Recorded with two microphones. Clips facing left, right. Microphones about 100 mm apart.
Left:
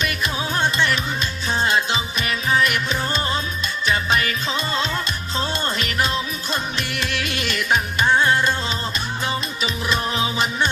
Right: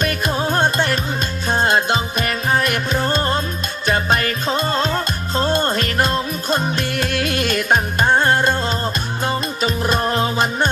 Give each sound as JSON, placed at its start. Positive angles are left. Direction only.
{"t": 0.0, "sound": "music", "side_deg": -45}